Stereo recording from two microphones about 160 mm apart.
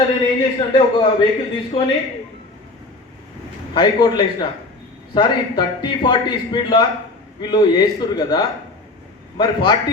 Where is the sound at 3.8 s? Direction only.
25° left (ahead or behind).